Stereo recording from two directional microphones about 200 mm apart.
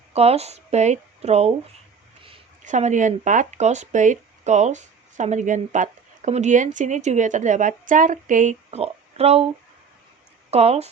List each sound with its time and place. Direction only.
0.1 s speech: 30° right (ahead or behind)
2.6 s speech: 35° right (ahead or behind)
10.5 s speech: 30° right (ahead or behind)